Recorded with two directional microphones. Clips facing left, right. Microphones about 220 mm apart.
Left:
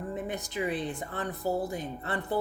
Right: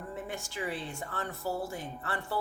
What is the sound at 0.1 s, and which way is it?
Speech, 20° left (ahead or behind).